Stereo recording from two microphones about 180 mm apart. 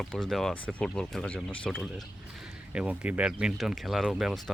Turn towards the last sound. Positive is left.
turn(degrees=0)  # may be behind; listen again after turning